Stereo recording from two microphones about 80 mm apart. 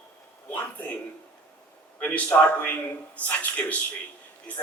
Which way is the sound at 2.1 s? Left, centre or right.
Centre.